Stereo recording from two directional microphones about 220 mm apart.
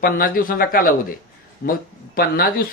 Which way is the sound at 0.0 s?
40° left (ahead or behind).